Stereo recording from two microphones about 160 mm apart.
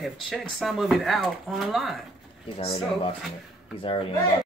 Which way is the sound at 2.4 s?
35° left (ahead or behind).